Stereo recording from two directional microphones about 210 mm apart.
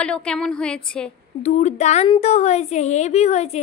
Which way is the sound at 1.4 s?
35° left (ahead or behind).